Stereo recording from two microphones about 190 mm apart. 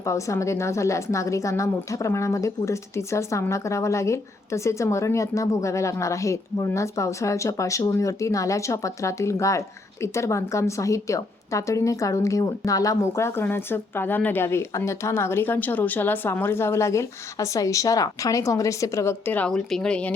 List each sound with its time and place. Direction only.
0.0 s a woman's voice: 15° left (ahead or behind)